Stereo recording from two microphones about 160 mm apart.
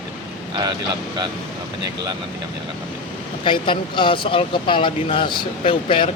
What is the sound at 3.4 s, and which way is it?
Speech, 30° left (ahead or behind).